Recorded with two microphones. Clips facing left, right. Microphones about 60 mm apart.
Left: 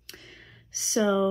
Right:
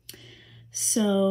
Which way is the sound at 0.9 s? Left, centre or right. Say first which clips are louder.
Even; left.